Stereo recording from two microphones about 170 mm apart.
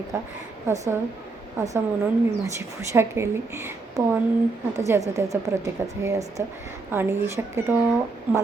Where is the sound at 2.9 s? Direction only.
15° right (ahead or behind).